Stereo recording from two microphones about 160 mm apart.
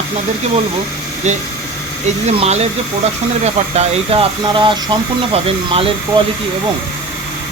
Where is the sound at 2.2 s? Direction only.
45° right (ahead or behind).